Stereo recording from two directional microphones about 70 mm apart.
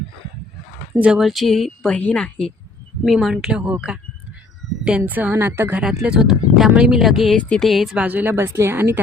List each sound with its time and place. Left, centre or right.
1.1 s a woman's voice: centre
3.1 s speech: centre
3.3 s a woman's voice: centre; by 5.7 s right
5.8 s speech: centre
7.9 s speech: right